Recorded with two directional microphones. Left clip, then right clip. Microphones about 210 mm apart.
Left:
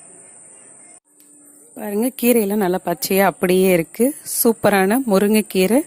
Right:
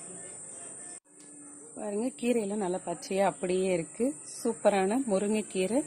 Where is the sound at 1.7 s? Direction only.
50° left (ahead or behind).